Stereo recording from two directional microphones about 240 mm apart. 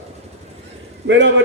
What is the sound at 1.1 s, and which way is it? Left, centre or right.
Speech, right.